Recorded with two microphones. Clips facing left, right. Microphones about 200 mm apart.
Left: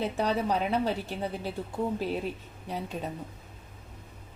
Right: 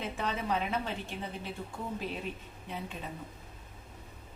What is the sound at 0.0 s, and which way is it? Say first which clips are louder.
A woman's voice: left 7 dB; 35° left (ahead or behind).